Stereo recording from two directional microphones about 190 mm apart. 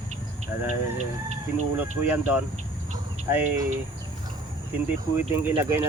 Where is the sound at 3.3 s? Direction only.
10° right (ahead or behind).